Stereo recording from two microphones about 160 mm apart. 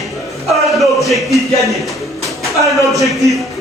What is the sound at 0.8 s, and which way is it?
Music, centre (ahead or behind).